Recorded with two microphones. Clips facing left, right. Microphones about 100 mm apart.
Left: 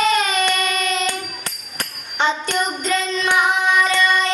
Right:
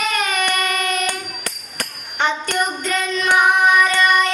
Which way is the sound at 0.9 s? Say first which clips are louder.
Even; 20° left (ahead or behind).